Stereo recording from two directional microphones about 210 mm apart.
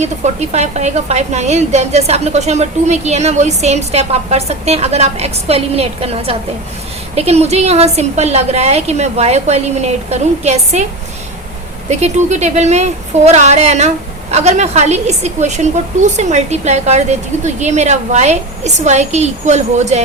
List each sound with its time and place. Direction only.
0.0 s speech: 30° right (ahead or behind)
11.9 s speech: 30° right (ahead or behind)